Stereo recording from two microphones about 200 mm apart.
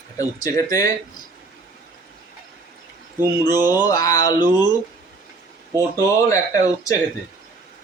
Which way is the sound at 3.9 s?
20° left (ahead or behind).